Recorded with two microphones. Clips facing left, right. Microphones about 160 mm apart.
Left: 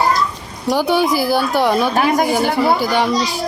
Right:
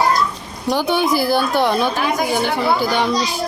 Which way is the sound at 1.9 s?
55° left (ahead or behind).